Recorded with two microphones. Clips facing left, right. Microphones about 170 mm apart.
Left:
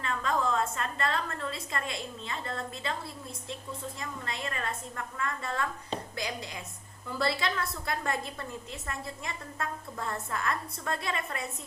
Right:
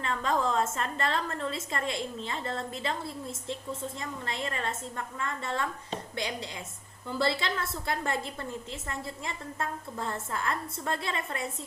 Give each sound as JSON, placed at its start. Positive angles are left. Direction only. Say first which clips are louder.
{"t": 0.0, "sound": "a woman's voice", "louder": "right 1 dB", "side_deg": -30}
{"t": 4.3, "sound": "a woman's voice", "louder": "right 2 dB", "side_deg": -30}
{"t": 7.1, "sound": "a woman's voice", "louder": "right 1 dB", "side_deg": -25}